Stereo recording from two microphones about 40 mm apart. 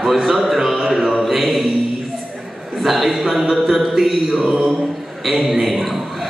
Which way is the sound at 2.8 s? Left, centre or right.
Centre.